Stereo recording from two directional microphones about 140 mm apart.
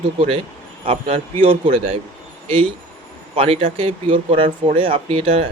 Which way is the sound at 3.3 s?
40° right (ahead or behind).